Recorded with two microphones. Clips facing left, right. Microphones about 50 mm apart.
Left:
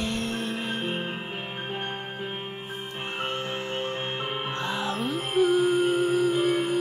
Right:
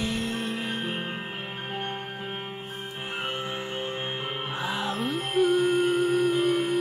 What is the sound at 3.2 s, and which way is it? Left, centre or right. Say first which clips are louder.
Music: left 2 dB; centre.